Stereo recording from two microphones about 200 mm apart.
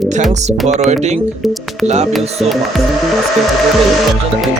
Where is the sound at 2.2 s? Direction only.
30° right (ahead or behind).